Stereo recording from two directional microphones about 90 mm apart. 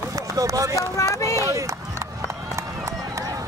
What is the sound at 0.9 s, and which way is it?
Speech, 35° left (ahead or behind).